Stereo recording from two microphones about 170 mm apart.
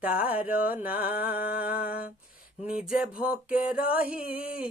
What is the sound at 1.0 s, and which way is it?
Mantra, 60° left (ahead or behind).